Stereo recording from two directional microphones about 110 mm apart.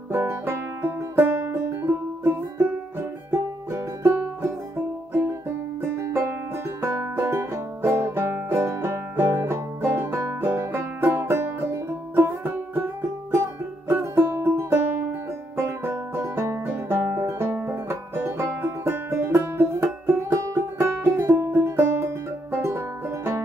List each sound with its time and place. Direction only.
0.1 s music: 20° right (ahead or behind)
5.9 s music: 20° right (ahead or behind)